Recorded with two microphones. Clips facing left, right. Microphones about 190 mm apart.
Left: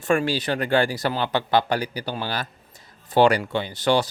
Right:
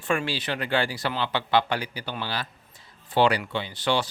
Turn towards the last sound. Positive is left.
turn(degrees=45)  # may be behind; listen again after turning